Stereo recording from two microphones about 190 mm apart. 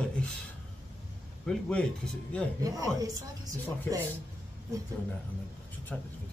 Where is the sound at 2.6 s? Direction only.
20° right (ahead or behind).